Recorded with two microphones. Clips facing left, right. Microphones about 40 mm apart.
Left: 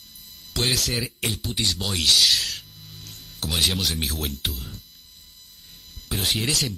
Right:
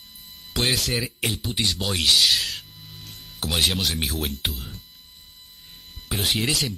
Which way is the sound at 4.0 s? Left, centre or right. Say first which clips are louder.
Right 1 dB; centre.